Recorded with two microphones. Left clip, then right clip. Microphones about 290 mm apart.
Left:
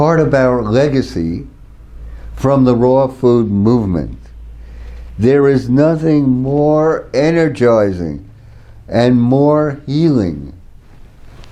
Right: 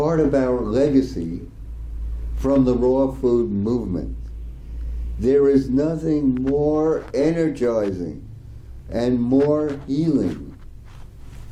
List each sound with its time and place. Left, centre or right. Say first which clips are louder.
0.0 s speech: left 8 dB; left
2.4 s speech: left 7 dB; left
5.2 s speech: left 5 dB; left